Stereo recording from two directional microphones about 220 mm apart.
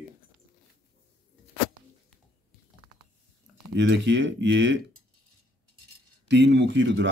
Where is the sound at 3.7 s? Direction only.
55° right (ahead or behind).